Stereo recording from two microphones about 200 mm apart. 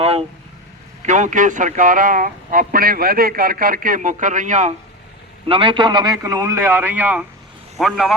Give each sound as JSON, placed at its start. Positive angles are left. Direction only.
{"t": 0.0, "sound": "vehicle", "side_deg": -30}
{"t": 1.0, "sound": "speech", "side_deg": -40}
{"t": 5.5, "sound": "a man's voice", "side_deg": -25}